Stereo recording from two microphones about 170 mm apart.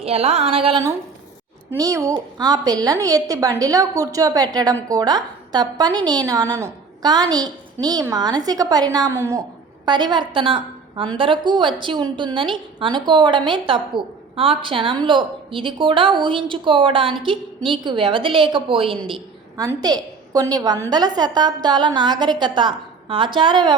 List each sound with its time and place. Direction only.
0.0 s a woman's voice: 35° right (ahead or behind)
1.8 s a woman's voice: 20° right (ahead or behind)
19.5 s a woman's voice: 20° right (ahead or behind)